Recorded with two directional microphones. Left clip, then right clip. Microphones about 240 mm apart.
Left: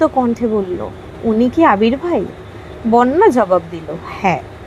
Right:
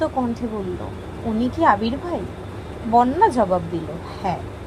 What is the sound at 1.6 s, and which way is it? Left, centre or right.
A woman's voice, left.